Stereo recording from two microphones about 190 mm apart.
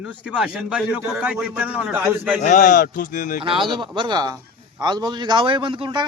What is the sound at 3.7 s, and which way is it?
A man's voice, 25° right (ahead or behind).